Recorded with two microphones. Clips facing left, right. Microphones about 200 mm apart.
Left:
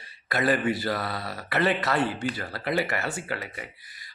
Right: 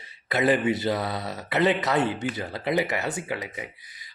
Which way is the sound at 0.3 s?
20° right (ahead or behind).